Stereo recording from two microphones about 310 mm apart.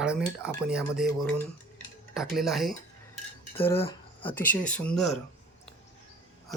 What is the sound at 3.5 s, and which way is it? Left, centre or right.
Speech, centre.